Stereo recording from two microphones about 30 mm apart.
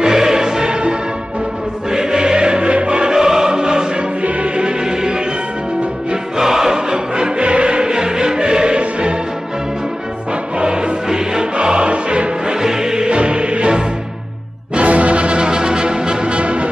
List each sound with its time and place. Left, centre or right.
0.0 s music: centre
3.2 s music: centre
4.2 s music: right
4.6 s music: right
6.3 s music: centre; by 7.9 s right
7.9 s music: right
10.6 s music: right
11.5 s music: right
12.4 s music: centre
13.1 s music: right
14.8 s music: right
16.3 s music: right